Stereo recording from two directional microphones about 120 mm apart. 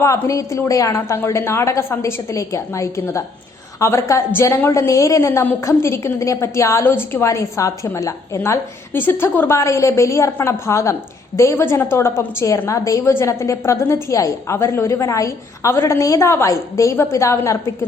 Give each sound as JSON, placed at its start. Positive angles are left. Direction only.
{"t": 0.0, "sound": "a woman's voice", "side_deg": 25}